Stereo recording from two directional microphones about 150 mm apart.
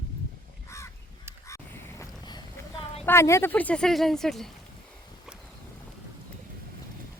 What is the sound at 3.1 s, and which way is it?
Speech, 20° left (ahead or behind).